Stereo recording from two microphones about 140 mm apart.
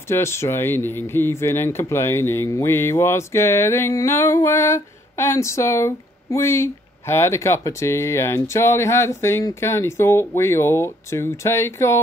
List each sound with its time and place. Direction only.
0.1 s speech: 20° left (ahead or behind)